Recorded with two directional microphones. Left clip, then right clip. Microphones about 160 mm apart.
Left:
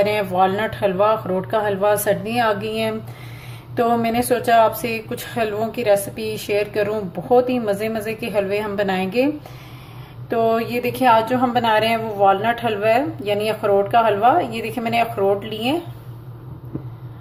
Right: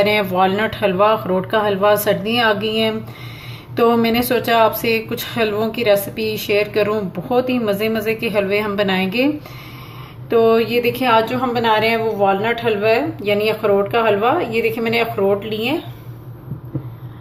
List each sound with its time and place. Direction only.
0.0 s speech: 5° left (ahead or behind)
10.3 s a woman's voice: 10° left (ahead or behind); by 15.8 s 25° left (ahead or behind)